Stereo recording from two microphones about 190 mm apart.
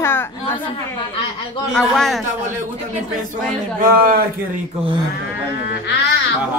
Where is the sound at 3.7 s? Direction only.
50° right (ahead or behind).